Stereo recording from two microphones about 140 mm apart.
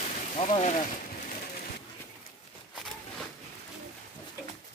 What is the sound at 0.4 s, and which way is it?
Speech, 55° left (ahead or behind).